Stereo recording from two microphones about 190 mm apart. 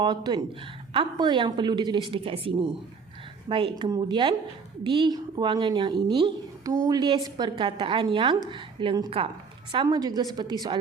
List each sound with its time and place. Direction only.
0.0 s a woman's voice: 25° right (ahead or behind)